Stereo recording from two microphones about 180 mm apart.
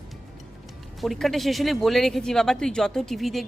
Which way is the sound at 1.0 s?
Centre (ahead or behind).